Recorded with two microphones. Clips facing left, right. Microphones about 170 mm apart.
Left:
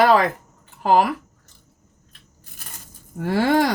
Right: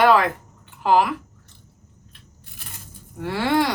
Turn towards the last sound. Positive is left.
turn(degrees=45)  # may be behind; listen again after turning